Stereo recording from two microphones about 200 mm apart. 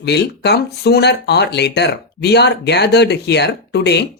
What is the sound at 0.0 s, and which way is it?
Speech, 55° left (ahead or behind).